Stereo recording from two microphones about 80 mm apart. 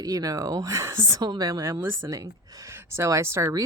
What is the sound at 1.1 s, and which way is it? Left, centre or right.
Speech, right.